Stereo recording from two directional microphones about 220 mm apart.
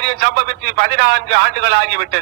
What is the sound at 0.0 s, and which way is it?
A man's voice, 50° right (ahead or behind).